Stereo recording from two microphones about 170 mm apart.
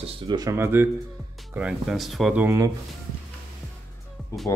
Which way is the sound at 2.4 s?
15° right (ahead or behind).